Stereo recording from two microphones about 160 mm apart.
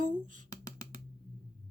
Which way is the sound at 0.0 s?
55° right (ahead or behind).